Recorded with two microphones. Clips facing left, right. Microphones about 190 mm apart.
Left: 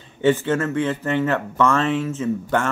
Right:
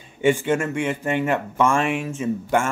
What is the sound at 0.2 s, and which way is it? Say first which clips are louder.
Speech: left 1 dB; 15° right (ahead or behind).